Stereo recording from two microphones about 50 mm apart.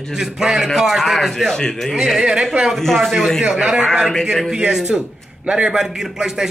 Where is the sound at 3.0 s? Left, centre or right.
Centre.